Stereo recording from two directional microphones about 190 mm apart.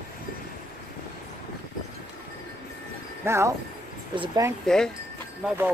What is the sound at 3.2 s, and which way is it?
Speech, 15° right (ahead or behind).